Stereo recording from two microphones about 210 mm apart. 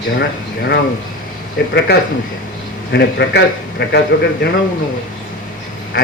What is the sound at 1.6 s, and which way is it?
Speech, 50° left (ahead or behind).